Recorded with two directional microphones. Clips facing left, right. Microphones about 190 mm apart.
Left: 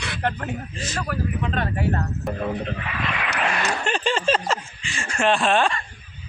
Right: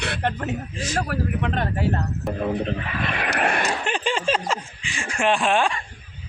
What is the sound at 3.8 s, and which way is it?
Speech, 15° right (ahead or behind).